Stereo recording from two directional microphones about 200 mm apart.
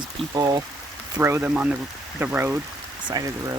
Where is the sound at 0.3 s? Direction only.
20° right (ahead or behind).